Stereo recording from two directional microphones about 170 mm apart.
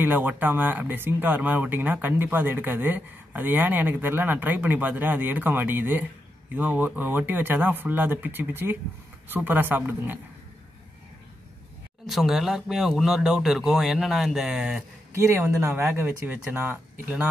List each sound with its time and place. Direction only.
0.0 s speech: 10° right (ahead or behind)
12.1 s a man's voice: centre (ahead or behind)
15.1 s speech: 15° right (ahead or behind)